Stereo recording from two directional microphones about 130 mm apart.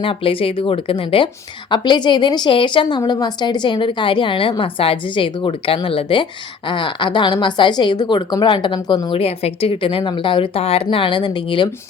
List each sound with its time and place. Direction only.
0.0 s a woman's voice: 40° left (ahead or behind)
9.1 s a woman's voice: 50° left (ahead or behind)
10.8 s a woman's voice: 40° left (ahead or behind)